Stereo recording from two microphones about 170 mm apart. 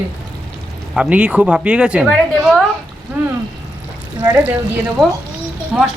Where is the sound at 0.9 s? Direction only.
5° right (ahead or behind).